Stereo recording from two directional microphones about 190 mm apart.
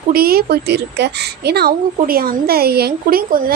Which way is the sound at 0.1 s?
50° right (ahead or behind).